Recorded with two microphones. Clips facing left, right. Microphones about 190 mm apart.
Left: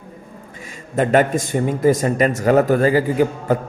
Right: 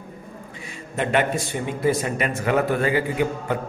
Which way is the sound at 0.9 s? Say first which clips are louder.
Left 6 dB; 45° left (ahead or behind).